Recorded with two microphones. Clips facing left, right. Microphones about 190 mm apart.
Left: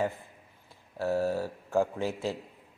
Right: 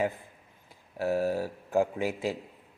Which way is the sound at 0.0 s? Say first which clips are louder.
Right 1 dB; 15° right (ahead or behind).